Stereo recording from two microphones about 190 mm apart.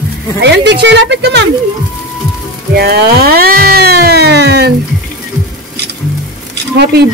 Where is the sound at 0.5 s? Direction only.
65° right (ahead or behind).